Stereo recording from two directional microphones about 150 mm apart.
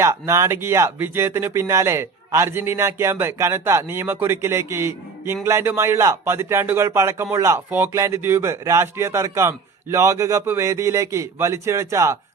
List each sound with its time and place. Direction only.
0.0 s speech: 20° right (ahead or behind)